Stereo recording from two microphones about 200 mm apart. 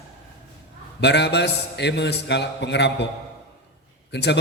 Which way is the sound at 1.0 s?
60° left (ahead or behind).